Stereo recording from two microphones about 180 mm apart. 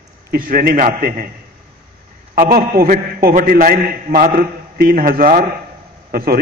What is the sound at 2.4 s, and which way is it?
A man's voice, 50° right (ahead or behind).